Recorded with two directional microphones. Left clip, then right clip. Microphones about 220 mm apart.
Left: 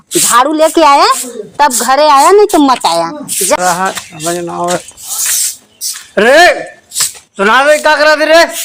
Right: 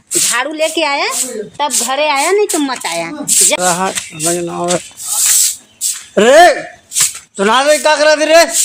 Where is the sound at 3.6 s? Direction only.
15° right (ahead or behind).